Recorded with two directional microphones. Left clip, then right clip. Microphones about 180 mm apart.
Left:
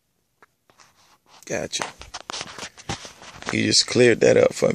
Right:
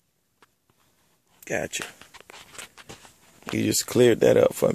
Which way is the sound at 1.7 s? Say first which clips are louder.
Left 5 dB; 15° left (ahead or behind).